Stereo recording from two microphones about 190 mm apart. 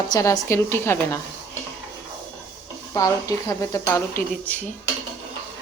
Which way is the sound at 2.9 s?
20° left (ahead or behind).